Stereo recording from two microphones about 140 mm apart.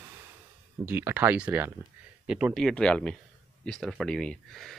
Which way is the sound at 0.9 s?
15° right (ahead or behind).